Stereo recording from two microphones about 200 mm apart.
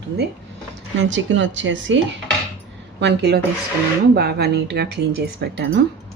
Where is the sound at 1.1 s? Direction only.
70° right (ahead or behind).